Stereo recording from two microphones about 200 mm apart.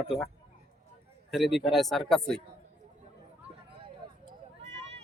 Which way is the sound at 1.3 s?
Centre (ahead or behind).